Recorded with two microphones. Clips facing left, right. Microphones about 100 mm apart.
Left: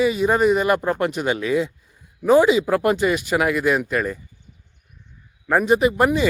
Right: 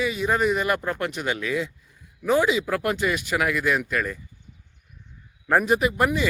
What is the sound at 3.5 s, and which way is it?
Speech, 30° left (ahead or behind).